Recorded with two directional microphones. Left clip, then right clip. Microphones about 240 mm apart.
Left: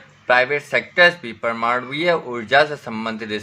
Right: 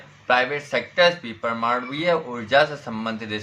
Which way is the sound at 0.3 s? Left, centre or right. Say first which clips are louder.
Left 4 dB; left.